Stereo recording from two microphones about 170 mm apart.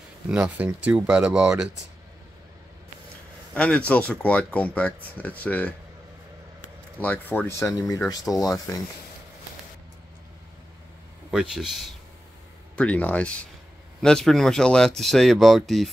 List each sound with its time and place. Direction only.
0.3 s speech: 10° right (ahead or behind)
3.5 s speech: 5° left (ahead or behind)
7.0 s speech: 10° left (ahead or behind)
11.2 s speech: 5° right (ahead or behind)